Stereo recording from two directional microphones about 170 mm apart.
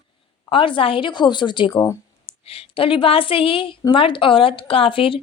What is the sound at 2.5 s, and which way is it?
A woman's voice, 35° left (ahead or behind).